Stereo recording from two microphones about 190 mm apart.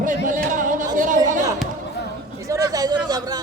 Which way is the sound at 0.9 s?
45° right (ahead or behind).